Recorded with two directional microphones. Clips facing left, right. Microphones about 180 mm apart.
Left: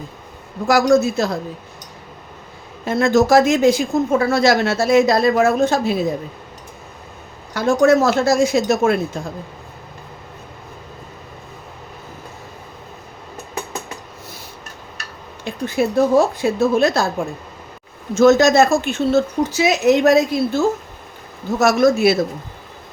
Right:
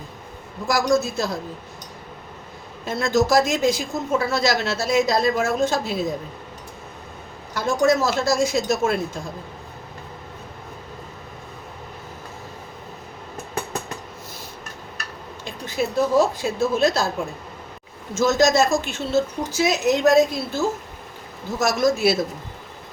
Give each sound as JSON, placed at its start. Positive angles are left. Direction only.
{"t": 0.7, "sound": "speech", "side_deg": 65}
{"t": 2.8, "sound": "speech", "side_deg": 60}
{"t": 7.5, "sound": "speech", "side_deg": 60}
{"t": 15.4, "sound": "speech", "side_deg": 55}
{"t": 18.1, "sound": "speech", "side_deg": 60}